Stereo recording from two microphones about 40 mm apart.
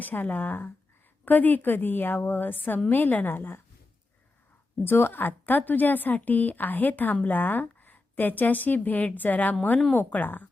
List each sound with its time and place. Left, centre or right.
0.0 s a woman's voice: left
4.8 s a woman's voice: left